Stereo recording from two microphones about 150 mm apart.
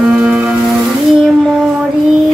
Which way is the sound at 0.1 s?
5° right (ahead or behind).